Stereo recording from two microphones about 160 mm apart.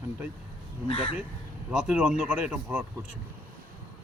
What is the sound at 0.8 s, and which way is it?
Speech, 40° left (ahead or behind).